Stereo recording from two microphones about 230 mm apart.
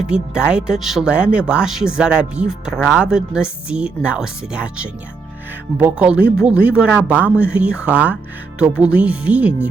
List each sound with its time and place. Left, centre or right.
0.1 s speech: centre